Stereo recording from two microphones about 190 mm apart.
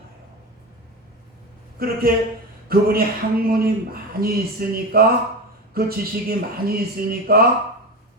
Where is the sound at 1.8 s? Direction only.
55° right (ahead or behind).